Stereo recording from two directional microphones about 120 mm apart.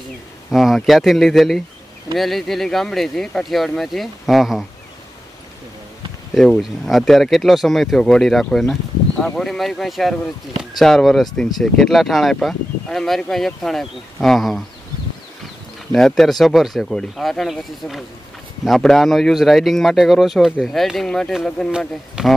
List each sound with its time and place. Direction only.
0.5 s speech: centre (ahead or behind)
6.3 s speech: centre (ahead or behind)
15.9 s speech: 5° left (ahead or behind)
21.7 s speech: 5° right (ahead or behind)